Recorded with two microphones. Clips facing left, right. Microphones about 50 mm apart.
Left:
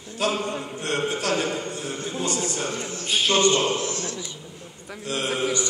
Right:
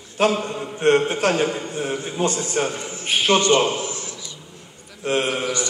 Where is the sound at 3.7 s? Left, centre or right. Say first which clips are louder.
Left 1 dB; centre.